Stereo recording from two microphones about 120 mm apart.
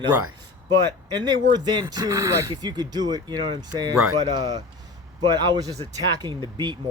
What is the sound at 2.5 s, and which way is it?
Speech, 35° right (ahead or behind).